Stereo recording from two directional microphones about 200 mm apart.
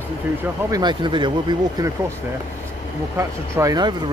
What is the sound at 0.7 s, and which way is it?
Speech, 20° right (ahead or behind).